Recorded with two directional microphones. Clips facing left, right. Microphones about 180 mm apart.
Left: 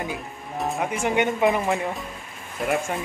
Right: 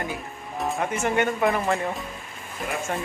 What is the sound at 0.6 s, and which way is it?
Music, centre (ahead or behind).